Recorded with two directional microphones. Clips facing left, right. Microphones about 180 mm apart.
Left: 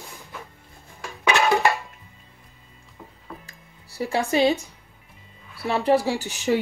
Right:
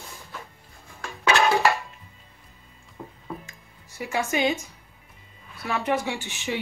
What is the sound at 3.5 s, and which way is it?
Music, 35° left (ahead or behind).